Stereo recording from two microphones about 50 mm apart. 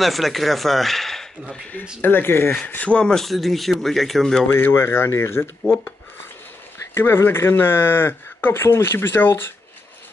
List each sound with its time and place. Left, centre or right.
0.0 s speech: centre
2.0 s speech: left
2.5 s speech: left
3.0 s speech: centre
3.3 s speech: centre
4.5 s speech: left
6.9 s speech: left